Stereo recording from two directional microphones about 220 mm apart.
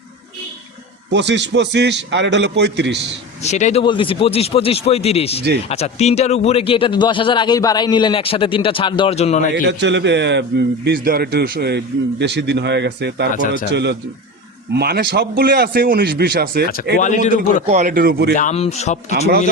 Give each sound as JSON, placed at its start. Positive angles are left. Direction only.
{"t": 1.1, "sound": "a man's voice", "side_deg": -55}
{"t": 3.4, "sound": "a man's voice", "side_deg": 30}
{"t": 9.6, "sound": "a man's voice", "side_deg": -55}
{"t": 13.3, "sound": "speech", "side_deg": 40}
{"t": 13.7, "sound": "a man's voice", "side_deg": -50}
{"t": 17.0, "sound": "speech", "side_deg": 35}
{"t": 17.3, "sound": "speech", "side_deg": -35}
{"t": 18.3, "sound": "a man's voice", "side_deg": 30}